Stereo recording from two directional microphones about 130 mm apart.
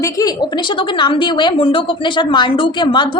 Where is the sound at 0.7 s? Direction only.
40° left (ahead or behind).